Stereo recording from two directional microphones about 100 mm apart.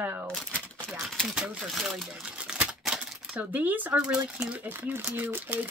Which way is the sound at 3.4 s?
15° right (ahead or behind).